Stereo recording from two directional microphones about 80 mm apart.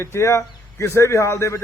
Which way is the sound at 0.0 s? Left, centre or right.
Left.